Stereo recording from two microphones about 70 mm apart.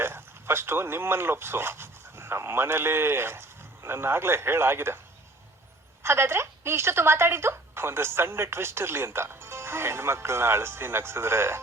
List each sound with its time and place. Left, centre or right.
0.0 s a woman's voice: right
6.0 s a woman's voice: right